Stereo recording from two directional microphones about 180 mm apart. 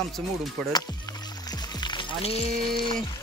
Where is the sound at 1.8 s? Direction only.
25° left (ahead or behind).